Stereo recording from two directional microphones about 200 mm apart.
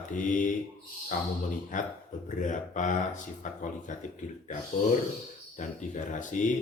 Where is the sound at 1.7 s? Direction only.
40° left (ahead or behind).